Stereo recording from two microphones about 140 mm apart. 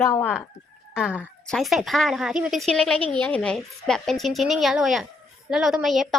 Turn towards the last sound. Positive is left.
turn(degrees=0)  # may be behind; listen again after turning